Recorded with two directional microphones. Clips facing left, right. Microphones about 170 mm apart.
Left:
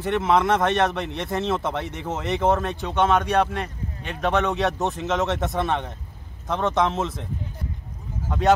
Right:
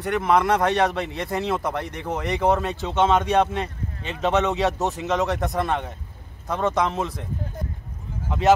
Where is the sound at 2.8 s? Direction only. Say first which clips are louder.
Right 1 dB; 20° right (ahead or behind).